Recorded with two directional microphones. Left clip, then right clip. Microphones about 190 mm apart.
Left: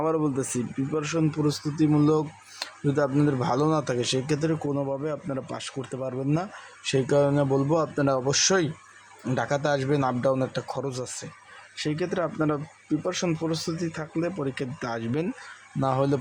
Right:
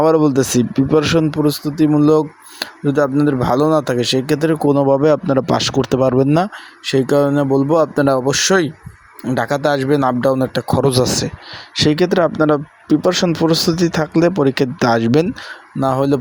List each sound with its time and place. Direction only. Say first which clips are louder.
0.0 s speech: right 13 dB; 35° right (ahead or behind)